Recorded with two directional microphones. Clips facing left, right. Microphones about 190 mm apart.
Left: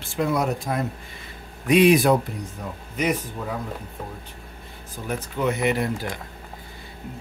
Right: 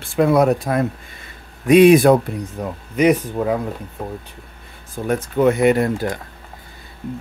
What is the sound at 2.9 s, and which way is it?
Speech, 75° right (ahead or behind).